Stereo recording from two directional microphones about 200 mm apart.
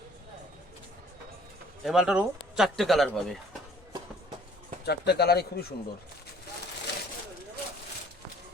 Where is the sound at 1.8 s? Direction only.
Centre (ahead or behind).